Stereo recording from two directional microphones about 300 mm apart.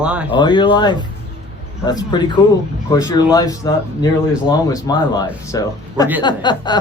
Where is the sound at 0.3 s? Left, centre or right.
Centre.